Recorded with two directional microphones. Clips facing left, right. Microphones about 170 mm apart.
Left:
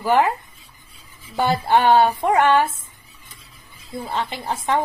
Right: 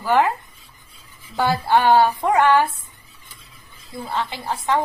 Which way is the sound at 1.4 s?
20° left (ahead or behind).